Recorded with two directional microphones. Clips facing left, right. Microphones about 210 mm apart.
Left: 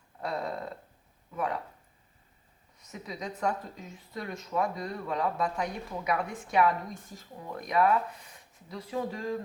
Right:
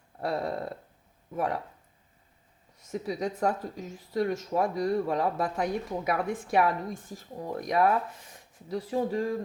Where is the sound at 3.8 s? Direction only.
80° right.